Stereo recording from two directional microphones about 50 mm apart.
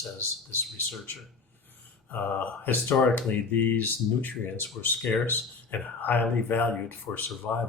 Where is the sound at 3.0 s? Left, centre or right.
Left.